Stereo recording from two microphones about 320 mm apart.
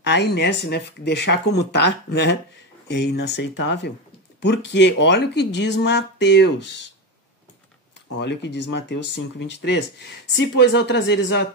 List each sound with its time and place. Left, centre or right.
0.0 s speech: left
5.5 s speech: left
5.8 s speech: left
8.2 s speech: left